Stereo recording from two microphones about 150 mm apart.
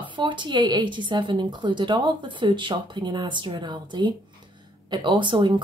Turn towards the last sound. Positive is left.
turn(degrees=-30)  # may be behind; listen again after turning